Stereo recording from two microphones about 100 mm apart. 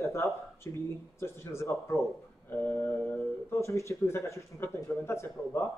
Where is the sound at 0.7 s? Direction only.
30° left (ahead or behind).